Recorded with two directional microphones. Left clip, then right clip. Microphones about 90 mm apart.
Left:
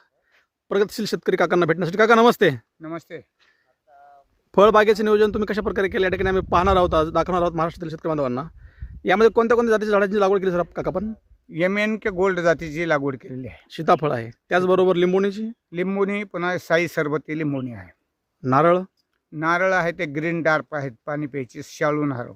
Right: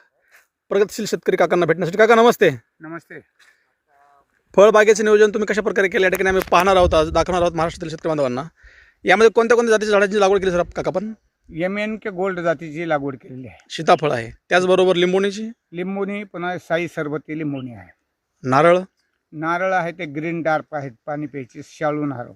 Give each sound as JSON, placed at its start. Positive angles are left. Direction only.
{"t": 0.7, "sound": "speech", "side_deg": 0}
{"t": 2.8, "sound": "a man's voice", "side_deg": 30}
{"t": 4.5, "sound": "speech", "side_deg": 0}
{"t": 11.5, "sound": "a man's voice", "side_deg": 40}
{"t": 13.7, "sound": "speech", "side_deg": 10}
{"t": 15.7, "sound": "a man's voice", "side_deg": 40}
{"t": 18.5, "sound": "speech", "side_deg": 5}
{"t": 19.3, "sound": "a man's voice", "side_deg": 35}